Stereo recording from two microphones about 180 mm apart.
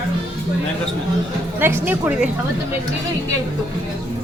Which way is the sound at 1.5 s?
10° right (ahead or behind).